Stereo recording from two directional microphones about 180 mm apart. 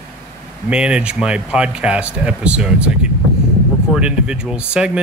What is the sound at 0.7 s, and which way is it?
Speech, 5° right (ahead or behind).